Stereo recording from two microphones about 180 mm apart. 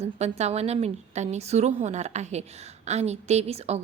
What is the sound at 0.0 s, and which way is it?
A woman's voice, 35° right (ahead or behind).